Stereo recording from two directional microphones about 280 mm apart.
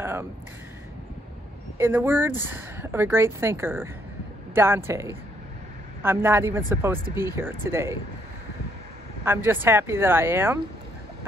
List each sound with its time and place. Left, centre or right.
0.0 s a sound: centre
1.8 s speech: centre
9.2 s speech: centre